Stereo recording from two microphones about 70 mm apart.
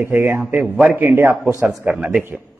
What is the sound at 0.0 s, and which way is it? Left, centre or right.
Speech, right.